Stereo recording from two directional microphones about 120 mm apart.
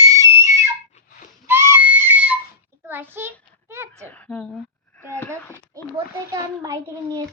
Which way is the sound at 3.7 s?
20° right (ahead or behind).